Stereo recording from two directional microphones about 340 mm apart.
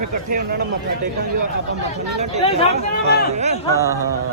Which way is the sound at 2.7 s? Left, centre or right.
Right.